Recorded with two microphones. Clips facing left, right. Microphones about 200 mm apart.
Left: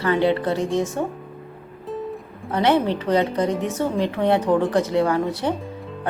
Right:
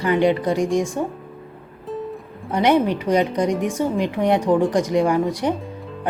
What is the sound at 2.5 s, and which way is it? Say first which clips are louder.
A woman's voice: right 2 dB; 15° right (ahead or behind).